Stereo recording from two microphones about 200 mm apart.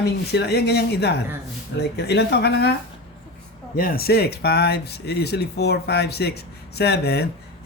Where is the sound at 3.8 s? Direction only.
50° left (ahead or behind).